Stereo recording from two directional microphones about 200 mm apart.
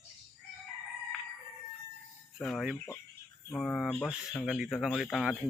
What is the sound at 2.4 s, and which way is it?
Speech, centre (ahead or behind).